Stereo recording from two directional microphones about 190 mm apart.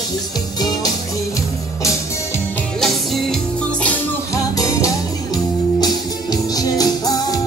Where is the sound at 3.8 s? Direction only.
15° left (ahead or behind).